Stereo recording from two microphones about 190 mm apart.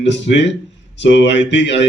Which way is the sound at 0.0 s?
70° left (ahead or behind).